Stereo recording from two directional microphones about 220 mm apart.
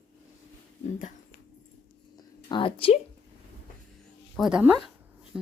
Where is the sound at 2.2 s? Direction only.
20° left (ahead or behind).